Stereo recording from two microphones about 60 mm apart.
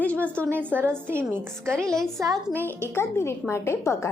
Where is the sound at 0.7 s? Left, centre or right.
Right.